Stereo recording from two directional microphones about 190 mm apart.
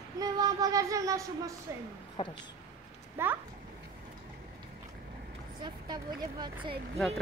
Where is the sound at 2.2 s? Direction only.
30° left (ahead or behind).